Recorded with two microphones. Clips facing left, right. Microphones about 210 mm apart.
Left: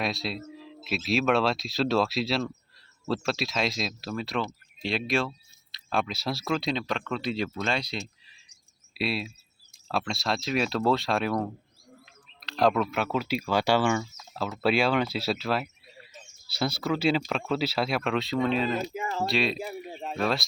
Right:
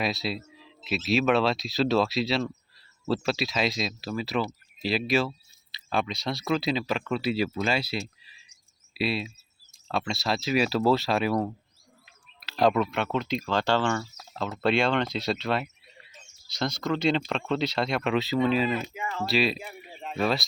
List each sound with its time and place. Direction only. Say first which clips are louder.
0.0 s speech: right 1 dB; centre (ahead or behind)
18.7 s speech: left 1 dB; 40° left (ahead or behind)
19.2 s speech: right 2 dB; centre (ahead or behind)
19.5 s a sound: left 7 dB; 40° left (ahead or behind)
20.1 s speech: right 1 dB; centre (ahead or behind)